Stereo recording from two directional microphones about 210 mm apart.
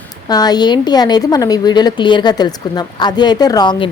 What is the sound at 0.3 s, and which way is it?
A woman's voice, 20° left (ahead or behind).